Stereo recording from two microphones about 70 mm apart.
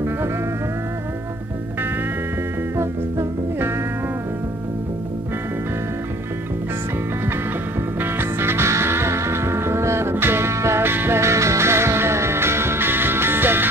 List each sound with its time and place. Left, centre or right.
2.8 s music: right
8.0 s music: right